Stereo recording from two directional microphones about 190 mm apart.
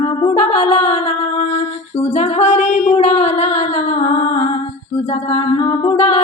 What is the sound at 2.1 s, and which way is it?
Music, 35° left (ahead or behind).